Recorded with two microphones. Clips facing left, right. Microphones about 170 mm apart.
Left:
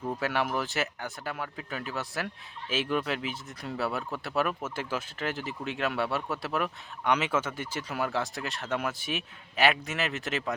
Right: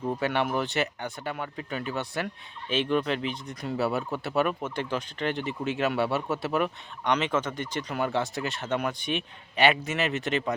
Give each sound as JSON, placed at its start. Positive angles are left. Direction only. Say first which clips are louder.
{"t": 0.0, "sound": "speech", "louder": "right 3 dB", "side_deg": 0}